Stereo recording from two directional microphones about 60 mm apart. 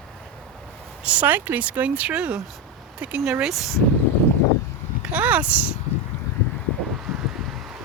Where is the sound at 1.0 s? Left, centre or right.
Right.